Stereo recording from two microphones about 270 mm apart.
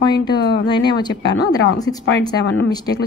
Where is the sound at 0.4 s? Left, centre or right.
Left.